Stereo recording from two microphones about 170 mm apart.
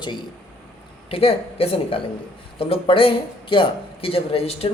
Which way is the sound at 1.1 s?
35° left (ahead or behind).